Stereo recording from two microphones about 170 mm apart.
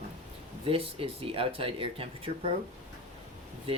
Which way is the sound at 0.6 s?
35° right (ahead or behind).